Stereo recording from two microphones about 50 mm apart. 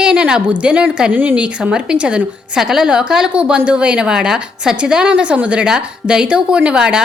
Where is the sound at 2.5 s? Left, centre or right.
Centre.